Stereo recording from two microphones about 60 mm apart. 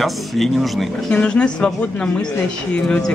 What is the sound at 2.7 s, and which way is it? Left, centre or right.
Speech, centre.